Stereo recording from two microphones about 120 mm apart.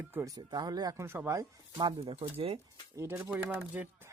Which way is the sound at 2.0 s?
55° right (ahead or behind).